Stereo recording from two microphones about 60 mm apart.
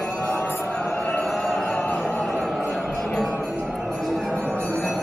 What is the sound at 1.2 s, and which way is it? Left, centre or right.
Music, centre.